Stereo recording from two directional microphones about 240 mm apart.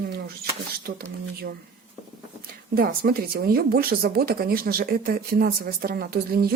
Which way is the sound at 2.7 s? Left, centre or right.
Right.